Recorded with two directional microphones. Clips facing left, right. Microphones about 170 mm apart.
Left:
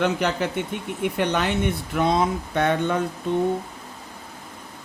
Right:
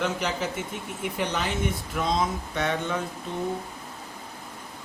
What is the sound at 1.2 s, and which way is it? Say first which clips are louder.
Speech: left 5 dB; 65° left (ahead or behind).